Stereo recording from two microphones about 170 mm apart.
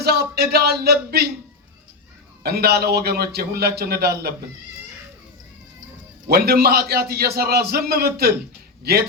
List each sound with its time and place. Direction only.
0.0 s a man's voice: 70° right (ahead or behind)
2.4 s a man's voice: 65° right (ahead or behind)
6.2 s a man's voice: 65° right (ahead or behind)